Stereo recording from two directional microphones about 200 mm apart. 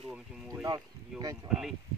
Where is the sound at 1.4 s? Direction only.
Centre (ahead or behind).